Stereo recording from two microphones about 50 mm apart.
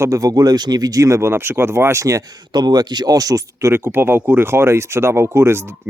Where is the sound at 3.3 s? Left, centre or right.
Right.